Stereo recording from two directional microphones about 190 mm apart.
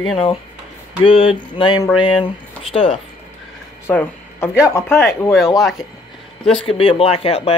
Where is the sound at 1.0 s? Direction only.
30° left (ahead or behind).